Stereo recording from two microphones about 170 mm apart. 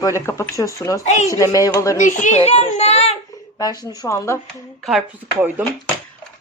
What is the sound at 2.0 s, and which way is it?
A child's voice, 45° left (ahead or behind).